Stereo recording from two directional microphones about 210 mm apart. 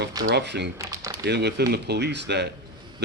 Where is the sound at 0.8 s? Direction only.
15° right (ahead or behind).